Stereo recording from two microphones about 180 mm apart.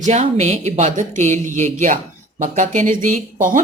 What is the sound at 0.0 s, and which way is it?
Speech, 40° right (ahead or behind).